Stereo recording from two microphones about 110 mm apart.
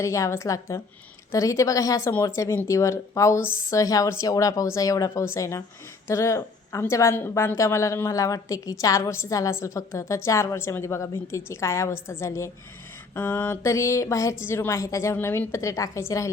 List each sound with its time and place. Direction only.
0.0 s a woman's voice: 30° left (ahead or behind)